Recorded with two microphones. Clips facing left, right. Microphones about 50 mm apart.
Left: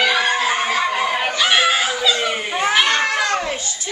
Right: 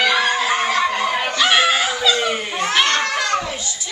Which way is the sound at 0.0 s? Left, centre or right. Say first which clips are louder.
Even; centre.